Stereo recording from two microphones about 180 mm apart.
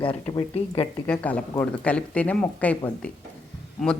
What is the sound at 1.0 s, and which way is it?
Speech, 10° left (ahead or behind).